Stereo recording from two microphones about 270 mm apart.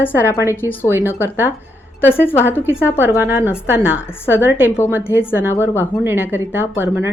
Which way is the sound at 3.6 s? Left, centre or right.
Centre.